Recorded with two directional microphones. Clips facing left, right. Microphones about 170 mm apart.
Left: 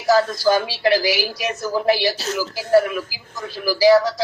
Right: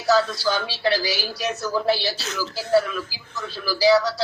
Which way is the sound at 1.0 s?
10° left (ahead or behind).